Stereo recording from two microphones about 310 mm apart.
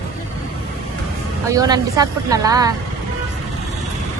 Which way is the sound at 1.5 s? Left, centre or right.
Centre.